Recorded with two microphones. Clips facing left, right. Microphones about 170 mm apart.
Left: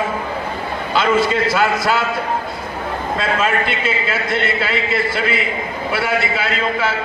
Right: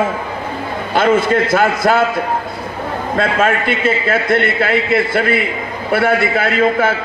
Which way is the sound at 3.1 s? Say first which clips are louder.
Right 4 dB; 55° right (ahead or behind).